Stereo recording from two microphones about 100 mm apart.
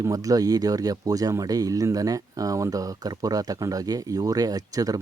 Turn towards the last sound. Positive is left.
turn(degrees=-35)  # may be behind; listen again after turning